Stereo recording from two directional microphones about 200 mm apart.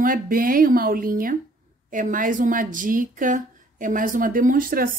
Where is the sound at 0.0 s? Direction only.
45° right (ahead or behind).